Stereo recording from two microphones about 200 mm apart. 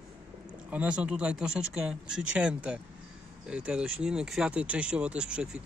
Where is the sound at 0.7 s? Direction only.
5° right (ahead or behind).